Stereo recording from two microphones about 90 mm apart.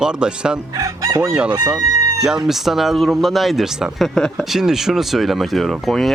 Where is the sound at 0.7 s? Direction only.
40° right (ahead or behind).